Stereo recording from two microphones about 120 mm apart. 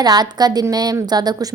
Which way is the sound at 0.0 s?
35° right (ahead or behind).